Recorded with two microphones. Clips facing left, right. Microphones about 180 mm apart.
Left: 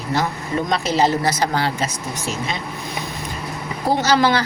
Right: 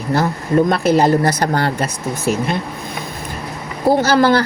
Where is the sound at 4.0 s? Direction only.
50° right (ahead or behind).